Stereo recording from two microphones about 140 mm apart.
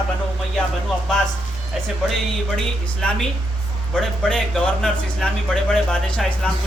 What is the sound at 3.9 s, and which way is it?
Speech, 5° left (ahead or behind).